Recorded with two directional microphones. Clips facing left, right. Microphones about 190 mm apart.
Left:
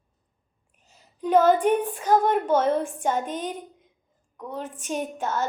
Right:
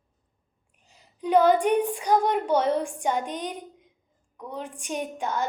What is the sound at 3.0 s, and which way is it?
A woman's voice, 15° right (ahead or behind).